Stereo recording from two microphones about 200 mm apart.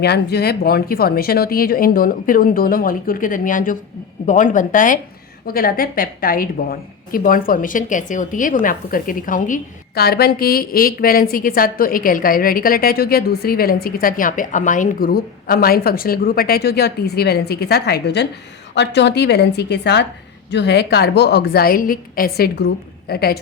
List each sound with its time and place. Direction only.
0.0 s a woman's voice: 55° left (ahead or behind)